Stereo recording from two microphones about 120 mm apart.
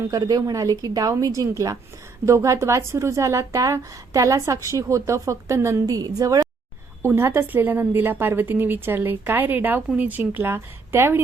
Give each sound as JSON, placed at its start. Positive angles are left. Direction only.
{"t": 0.1, "sound": "a woman's voice", "side_deg": -30}
{"t": 7.0, "sound": "a woman's voice", "side_deg": -20}